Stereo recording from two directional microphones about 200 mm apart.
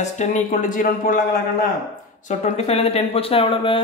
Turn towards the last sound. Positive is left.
turn(degrees=25)  # may be behind; listen again after turning